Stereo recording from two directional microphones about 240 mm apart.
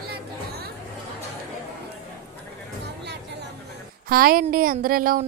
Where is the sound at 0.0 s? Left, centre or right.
Right.